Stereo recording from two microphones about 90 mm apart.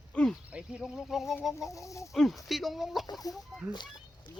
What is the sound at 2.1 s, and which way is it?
Speech, centre (ahead or behind).